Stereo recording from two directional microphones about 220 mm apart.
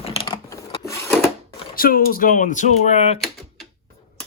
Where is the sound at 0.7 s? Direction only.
15° left (ahead or behind).